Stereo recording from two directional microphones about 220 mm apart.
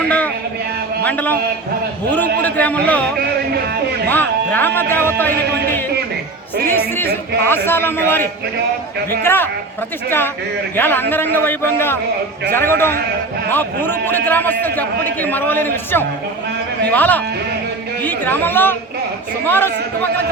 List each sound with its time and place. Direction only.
0.0 s a sound: 5° left (ahead or behind)
1.0 s speech: 5° left (ahead or behind)
2.4 s speech: 5° left (ahead or behind)
4.1 s speech: 10° left (ahead or behind)
5.5 s a man's voice: 50° right (ahead or behind)
6.7 s speech: 10° left (ahead or behind)
10.8 s speech: 10° left (ahead or behind)